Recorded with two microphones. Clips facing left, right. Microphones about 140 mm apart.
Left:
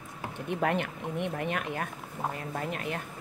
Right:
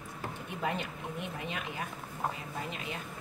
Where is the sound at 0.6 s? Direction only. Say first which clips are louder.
Left 5 dB; 65° left (ahead or behind).